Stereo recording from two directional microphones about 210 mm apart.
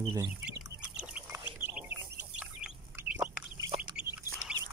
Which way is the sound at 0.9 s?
5° right (ahead or behind).